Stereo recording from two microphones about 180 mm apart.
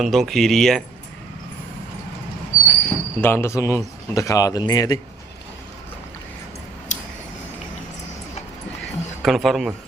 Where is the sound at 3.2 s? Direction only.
15° left (ahead or behind).